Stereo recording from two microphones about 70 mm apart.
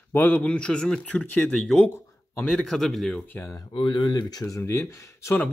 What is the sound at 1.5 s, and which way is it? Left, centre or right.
Speech, centre.